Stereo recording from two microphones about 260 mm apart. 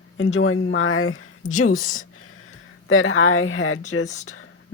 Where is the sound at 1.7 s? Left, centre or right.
Left.